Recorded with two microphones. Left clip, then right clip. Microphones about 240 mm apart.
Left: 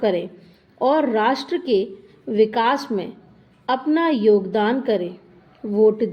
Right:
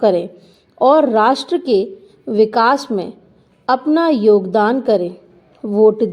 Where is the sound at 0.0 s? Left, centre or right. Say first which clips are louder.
Right 7 dB; right.